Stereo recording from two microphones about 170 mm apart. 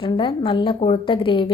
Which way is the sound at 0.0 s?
30° left (ahead or behind).